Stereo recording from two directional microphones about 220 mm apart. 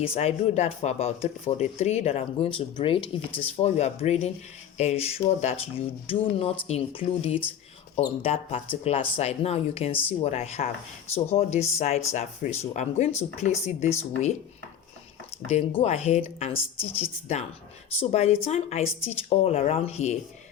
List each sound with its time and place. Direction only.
0.0 s speech: 25° left (ahead or behind)
15.8 s speech: 30° left (ahead or behind)